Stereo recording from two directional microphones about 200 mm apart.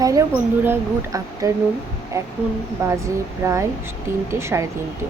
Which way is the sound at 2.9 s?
15° right (ahead or behind).